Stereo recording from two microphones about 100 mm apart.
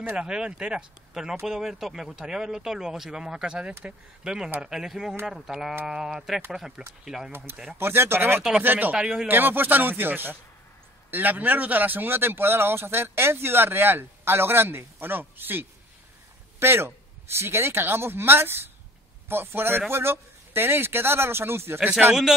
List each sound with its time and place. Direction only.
0.1 s speech: 10° right (ahead or behind)
7.7 s a man's voice: 25° right (ahead or behind)
8.9 s speech: 5° right (ahead or behind)
9.3 s a man's voice: 20° right (ahead or behind)
21.7 s speech: 5° right (ahead or behind)